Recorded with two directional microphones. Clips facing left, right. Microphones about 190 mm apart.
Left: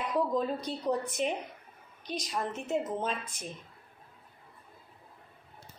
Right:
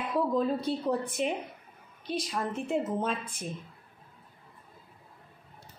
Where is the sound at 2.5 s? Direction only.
30° right (ahead or behind).